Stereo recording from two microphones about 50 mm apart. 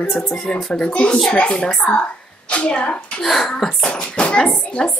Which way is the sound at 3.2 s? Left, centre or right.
Centre.